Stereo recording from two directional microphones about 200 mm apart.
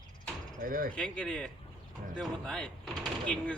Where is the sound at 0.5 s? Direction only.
45° right (ahead or behind).